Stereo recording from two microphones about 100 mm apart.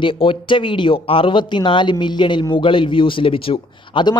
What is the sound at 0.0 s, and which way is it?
A man's voice, 55° left (ahead or behind).